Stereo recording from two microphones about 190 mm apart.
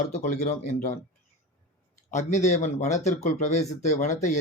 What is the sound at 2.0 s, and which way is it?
Speech, 40° left (ahead or behind).